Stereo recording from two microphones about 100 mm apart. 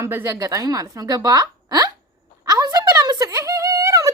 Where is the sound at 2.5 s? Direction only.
40° right (ahead or behind).